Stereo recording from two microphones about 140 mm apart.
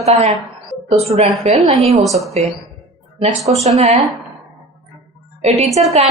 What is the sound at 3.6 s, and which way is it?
Speech, 50° right (ahead or behind).